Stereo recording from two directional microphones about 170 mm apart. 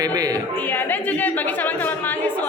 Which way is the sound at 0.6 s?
10° left (ahead or behind).